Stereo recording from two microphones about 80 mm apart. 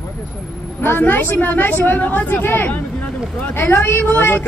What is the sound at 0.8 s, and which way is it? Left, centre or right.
Speech, left.